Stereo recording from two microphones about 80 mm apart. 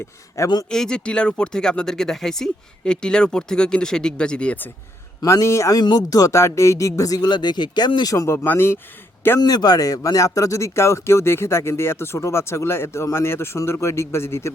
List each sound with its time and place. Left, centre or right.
0.4 s speech: left
0.7 s speech: centre
5.2 s speech: left
5.8 s speech: left
8.0 s speech: left
8.4 s speech: left
9.4 s speech: left